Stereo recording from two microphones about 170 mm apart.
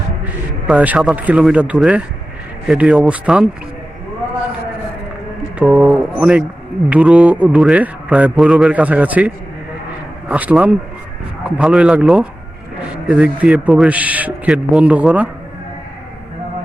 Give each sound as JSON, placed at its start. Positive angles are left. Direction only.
{"t": 0.7, "sound": "speech", "side_deg": -10}
{"t": 5.5, "sound": "speech", "side_deg": -5}